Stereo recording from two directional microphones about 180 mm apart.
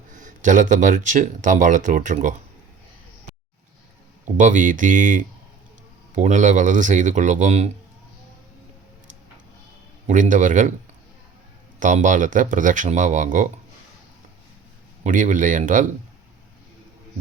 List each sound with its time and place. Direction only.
0.1 s speech: 45° right (ahead or behind)
4.4 s speech: 45° right (ahead or behind)
10.1 s speech: 45° right (ahead or behind)
11.8 s speech: 45° right (ahead or behind)
15.0 s speech: 45° right (ahead or behind)